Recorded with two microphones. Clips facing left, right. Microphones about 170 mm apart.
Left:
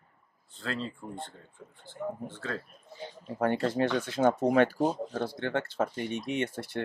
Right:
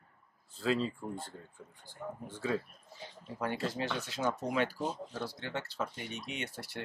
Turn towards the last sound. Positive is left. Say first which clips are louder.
# left 9 dB
turn(degrees=50)  # may be behind; listen again after turning